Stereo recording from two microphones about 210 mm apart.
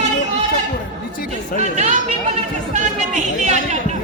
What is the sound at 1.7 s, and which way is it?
Chatter, 35° right (ahead or behind).